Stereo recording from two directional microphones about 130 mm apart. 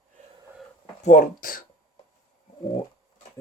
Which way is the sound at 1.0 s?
80° left.